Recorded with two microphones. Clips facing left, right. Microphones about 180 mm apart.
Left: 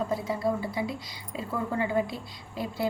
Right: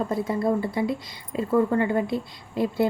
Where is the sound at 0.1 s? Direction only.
55° right (ahead or behind).